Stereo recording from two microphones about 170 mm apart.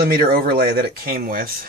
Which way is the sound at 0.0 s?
60° right (ahead or behind).